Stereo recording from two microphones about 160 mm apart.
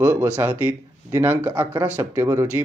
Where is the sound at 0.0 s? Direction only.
10° right (ahead or behind).